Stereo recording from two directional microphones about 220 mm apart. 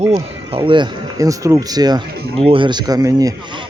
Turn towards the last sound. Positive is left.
turn(degrees=-15)  # may be behind; listen again after turning